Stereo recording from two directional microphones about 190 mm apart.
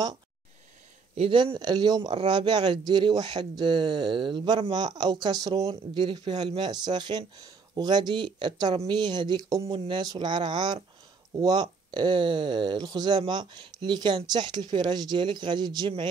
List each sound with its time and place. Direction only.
1.1 s speech: 30° right (ahead or behind)